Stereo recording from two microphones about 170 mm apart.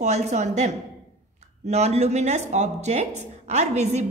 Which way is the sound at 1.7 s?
40° right (ahead or behind).